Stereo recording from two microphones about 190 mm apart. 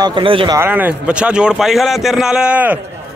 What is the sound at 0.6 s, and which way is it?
A man's voice, 10° right (ahead or behind).